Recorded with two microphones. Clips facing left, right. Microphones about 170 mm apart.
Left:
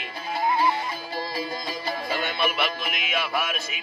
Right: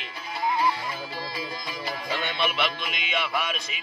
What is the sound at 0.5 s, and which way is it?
Music, 25° left (ahead or behind).